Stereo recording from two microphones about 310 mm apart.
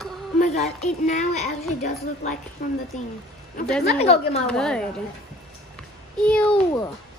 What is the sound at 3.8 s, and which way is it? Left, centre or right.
Speech, left.